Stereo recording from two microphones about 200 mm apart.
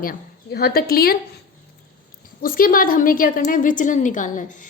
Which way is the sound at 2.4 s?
45° left (ahead or behind).